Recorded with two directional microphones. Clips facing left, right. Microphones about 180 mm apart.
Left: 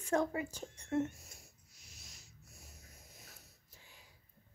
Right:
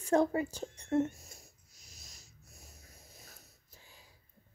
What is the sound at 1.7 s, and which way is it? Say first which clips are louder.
Snort: right 1 dB; 40° right (ahead or behind).